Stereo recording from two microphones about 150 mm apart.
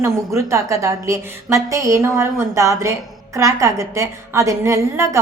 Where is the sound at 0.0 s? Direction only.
20° right (ahead or behind).